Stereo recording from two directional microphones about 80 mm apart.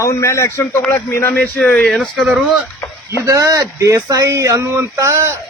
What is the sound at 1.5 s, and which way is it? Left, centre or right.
Speech, centre.